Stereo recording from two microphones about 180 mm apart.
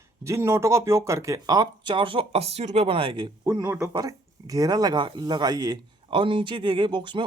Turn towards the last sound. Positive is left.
turn(degrees=-25)  # may be behind; listen again after turning